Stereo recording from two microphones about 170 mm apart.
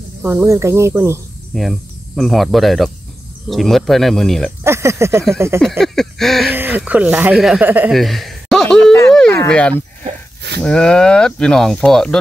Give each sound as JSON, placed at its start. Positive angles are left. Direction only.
{"t": 0.2, "sound": "speech", "side_deg": -15}
{"t": 1.5, "sound": "speech", "side_deg": 0}
{"t": 4.6, "sound": "speech", "side_deg": -15}
{"t": 5.6, "sound": "speech", "side_deg": 0}
{"t": 6.5, "sound": "speech", "side_deg": -10}
{"t": 7.9, "sound": "a sound", "side_deg": 0}
{"t": 9.5, "sound": "speech", "side_deg": 10}